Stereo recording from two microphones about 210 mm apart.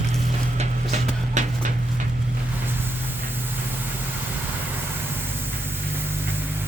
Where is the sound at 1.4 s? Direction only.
35° right (ahead or behind).